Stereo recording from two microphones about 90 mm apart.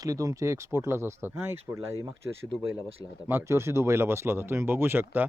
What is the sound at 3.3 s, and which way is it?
Speech, 25° right (ahead or behind).